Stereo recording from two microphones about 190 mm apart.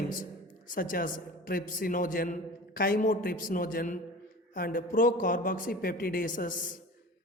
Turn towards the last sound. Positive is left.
turn(degrees=45)  # may be behind; listen again after turning